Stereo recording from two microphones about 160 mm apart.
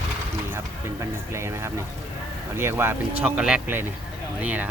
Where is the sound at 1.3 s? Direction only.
15° right (ahead or behind).